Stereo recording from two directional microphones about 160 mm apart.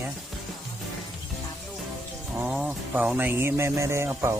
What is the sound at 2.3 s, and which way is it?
Speech, 5° right (ahead or behind).